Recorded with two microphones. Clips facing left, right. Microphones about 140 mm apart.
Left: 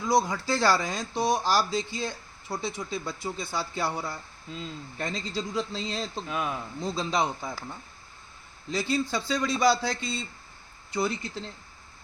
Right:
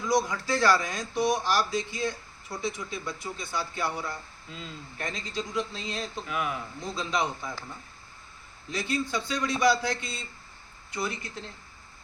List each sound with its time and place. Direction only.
0.1 s speech: 30° left (ahead or behind)
8.7 s speech: 30° left (ahead or behind)